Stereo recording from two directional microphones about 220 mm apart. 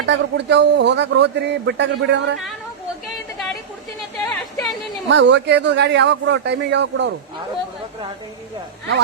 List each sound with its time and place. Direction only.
0.0 s a man's voice: 55° right (ahead or behind)
4.3 s a sound: centre (ahead or behind)
5.0 s a man's voice: 55° right (ahead or behind)